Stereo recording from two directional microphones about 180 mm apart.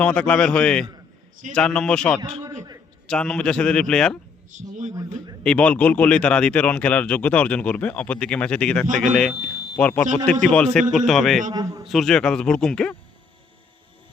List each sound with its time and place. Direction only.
0.0 s speech: 5° left (ahead or behind)
4.5 s speech: 40° right (ahead or behind)
5.4 s speech: 5° left (ahead or behind)
11.5 s a man's voice: 20° right (ahead or behind)
11.9 s speech: centre (ahead or behind)